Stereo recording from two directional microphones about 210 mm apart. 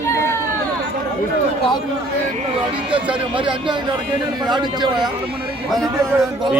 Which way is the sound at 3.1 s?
25° right (ahead or behind).